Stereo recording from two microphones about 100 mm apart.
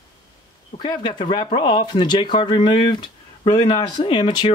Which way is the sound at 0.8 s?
50° left (ahead or behind).